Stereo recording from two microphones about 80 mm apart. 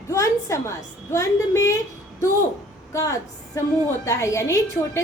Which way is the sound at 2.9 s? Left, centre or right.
Left.